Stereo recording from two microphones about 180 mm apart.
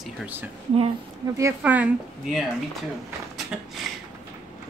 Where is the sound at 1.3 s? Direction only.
10° right (ahead or behind).